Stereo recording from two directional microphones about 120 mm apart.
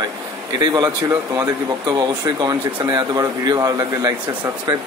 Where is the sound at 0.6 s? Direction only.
35° right (ahead or behind).